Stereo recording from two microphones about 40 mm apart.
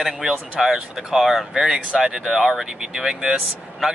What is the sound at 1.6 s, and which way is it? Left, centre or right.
Speech, centre.